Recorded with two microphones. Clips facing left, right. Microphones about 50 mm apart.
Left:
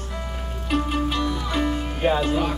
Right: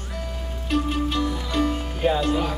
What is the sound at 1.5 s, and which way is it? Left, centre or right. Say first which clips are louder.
Music: even; centre.